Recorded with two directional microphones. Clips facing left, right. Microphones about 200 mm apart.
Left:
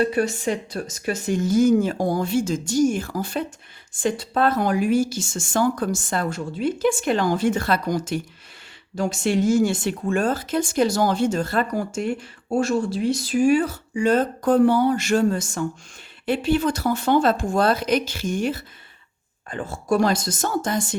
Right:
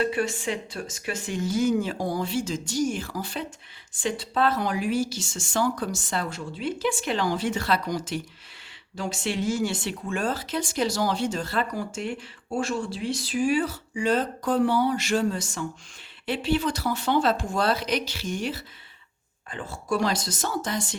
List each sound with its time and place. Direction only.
0.0 s speech: 40° left (ahead or behind)